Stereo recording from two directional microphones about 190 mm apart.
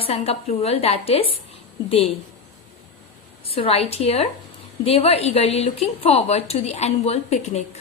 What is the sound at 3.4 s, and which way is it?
A woman's voice, 30° left (ahead or behind).